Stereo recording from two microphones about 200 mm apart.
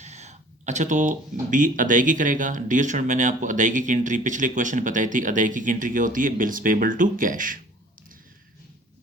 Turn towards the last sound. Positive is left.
turn(degrees=-40)  # may be behind; listen again after turning